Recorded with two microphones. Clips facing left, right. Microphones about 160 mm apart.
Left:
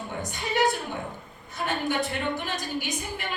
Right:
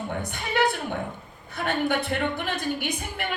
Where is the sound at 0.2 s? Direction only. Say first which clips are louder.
Even; 60° right (ahead or behind).